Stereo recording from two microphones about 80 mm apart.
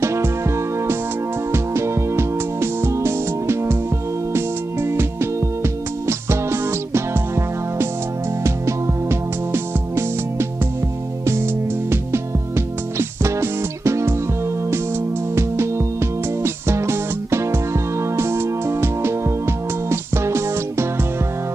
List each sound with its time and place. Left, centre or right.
0.0 s music: right
11.9 s music: right
15.3 s music: right